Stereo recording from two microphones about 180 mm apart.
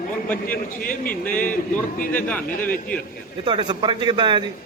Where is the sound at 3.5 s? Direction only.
25° right (ahead or behind).